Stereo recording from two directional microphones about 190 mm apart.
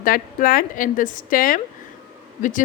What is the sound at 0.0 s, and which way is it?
A woman's voice, 45° left (ahead or behind).